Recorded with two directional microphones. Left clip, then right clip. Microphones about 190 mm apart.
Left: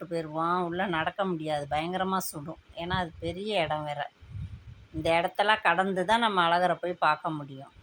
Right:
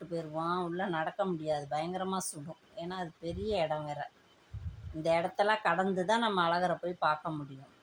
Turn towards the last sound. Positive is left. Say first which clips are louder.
# left 5 dB
turn(degrees=20)  # may be behind; listen again after turning